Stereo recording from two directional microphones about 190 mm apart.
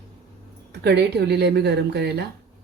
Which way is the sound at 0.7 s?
60° right (ahead or behind).